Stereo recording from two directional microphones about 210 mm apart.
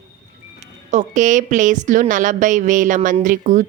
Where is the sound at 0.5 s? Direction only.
35° right (ahead or behind).